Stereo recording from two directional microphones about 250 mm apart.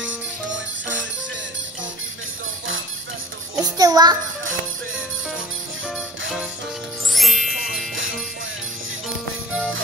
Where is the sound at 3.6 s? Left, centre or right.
Centre.